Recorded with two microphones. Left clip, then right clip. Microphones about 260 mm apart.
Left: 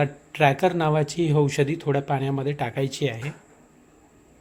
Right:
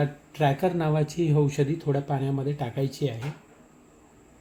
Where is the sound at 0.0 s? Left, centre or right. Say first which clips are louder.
Left 5 dB; left.